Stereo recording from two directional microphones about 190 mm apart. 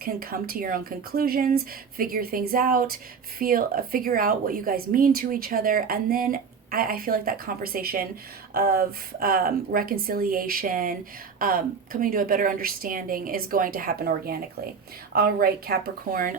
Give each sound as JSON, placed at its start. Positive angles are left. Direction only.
{"t": 0.0, "sound": "speech", "side_deg": -50}